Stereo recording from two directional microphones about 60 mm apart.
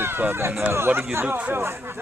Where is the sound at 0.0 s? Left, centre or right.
Right.